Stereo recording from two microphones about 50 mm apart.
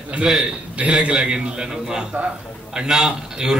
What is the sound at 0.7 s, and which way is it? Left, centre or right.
Speech, right.